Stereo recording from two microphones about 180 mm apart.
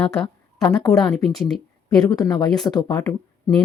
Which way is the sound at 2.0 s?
20° left (ahead or behind).